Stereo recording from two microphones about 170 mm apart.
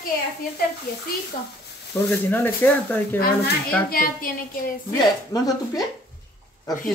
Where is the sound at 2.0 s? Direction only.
10° left (ahead or behind).